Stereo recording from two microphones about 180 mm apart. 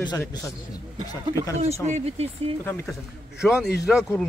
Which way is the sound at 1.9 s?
35° right (ahead or behind).